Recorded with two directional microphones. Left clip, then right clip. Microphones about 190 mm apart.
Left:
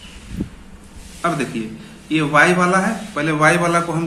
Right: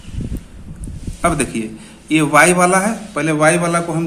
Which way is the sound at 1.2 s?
50° right (ahead or behind).